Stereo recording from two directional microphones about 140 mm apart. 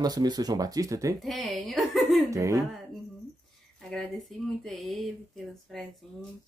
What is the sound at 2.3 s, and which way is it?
Speech, 20° right (ahead or behind).